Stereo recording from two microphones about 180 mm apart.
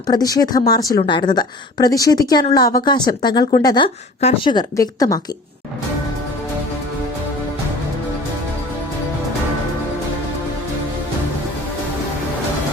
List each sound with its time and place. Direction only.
0.1 s a woman's voice: 20° left (ahead or behind)